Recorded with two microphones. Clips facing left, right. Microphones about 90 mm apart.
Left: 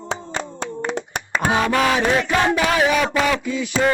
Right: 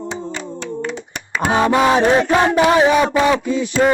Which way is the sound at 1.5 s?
25° right (ahead or behind).